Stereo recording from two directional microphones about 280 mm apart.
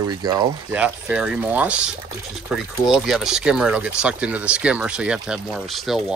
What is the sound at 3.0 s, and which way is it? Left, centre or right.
Speech, centre.